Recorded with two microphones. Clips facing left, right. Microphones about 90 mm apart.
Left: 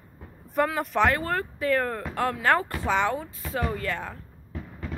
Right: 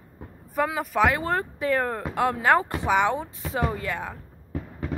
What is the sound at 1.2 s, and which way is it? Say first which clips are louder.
Speech: right 2 dB; 20° right (ahead or behind).